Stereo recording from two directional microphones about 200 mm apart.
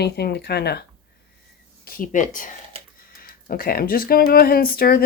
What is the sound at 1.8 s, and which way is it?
Speech, 45° left (ahead or behind).